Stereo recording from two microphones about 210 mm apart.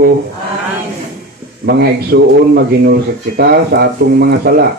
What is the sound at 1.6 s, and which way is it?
Speech, 50° right (ahead or behind).